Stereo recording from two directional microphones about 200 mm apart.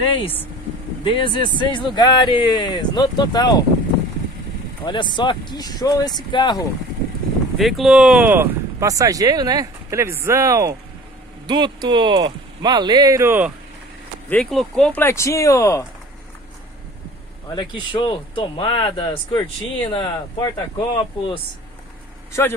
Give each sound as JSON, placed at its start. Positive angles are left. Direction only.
{"t": 1.0, "sound": "speech", "side_deg": 25}
{"t": 4.8, "sound": "speech", "side_deg": 25}
{"t": 7.5, "sound": "speech", "side_deg": 0}
{"t": 14.3, "sound": "speech", "side_deg": 0}
{"t": 17.5, "sound": "speech", "side_deg": 20}